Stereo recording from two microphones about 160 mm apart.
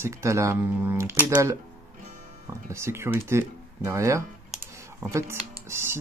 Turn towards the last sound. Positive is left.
turn(degrees=-15)  # may be behind; listen again after turning